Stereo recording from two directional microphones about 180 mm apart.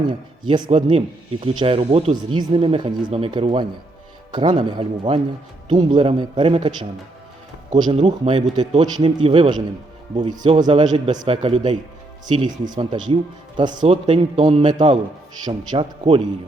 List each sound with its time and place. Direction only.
0.1 s speech: 25° right (ahead or behind)
7.9 s speech: 35° right (ahead or behind)